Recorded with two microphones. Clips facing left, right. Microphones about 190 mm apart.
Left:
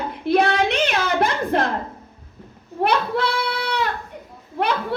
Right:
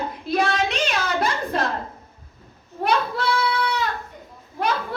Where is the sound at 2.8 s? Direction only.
65° left (ahead or behind).